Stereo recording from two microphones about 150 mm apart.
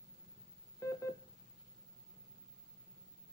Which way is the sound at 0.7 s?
20° left (ahead or behind).